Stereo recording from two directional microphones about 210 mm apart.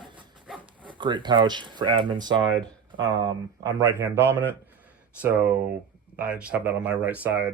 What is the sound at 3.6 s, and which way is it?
Speech, 15° right (ahead or behind).